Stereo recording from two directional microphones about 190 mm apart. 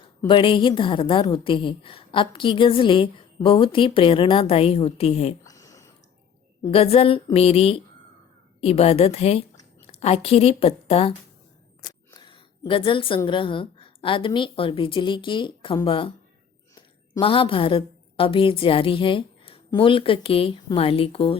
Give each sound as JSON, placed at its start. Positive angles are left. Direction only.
{"t": 0.3, "sound": "a woman's voice", "side_deg": 25}
{"t": 5.4, "sound": "a sound", "side_deg": 15}
{"t": 6.7, "sound": "a woman's voice", "side_deg": 30}
{"t": 12.1, "sound": "a woman's voice", "side_deg": 25}
{"t": 17.2, "sound": "a woman's voice", "side_deg": 30}